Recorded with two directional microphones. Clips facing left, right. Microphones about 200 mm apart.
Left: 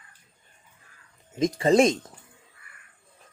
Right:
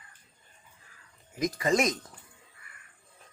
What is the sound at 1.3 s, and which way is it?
Speech, 30° left (ahead or behind).